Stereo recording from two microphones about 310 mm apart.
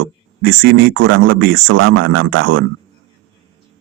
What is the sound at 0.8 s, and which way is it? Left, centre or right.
A man's voice, right.